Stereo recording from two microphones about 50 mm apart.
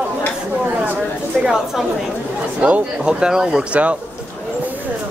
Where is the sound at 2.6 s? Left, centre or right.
Right.